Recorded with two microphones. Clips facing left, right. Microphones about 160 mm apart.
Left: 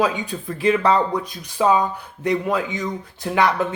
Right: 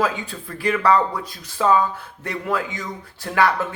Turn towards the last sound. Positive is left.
turn(degrees=20)  # may be behind; listen again after turning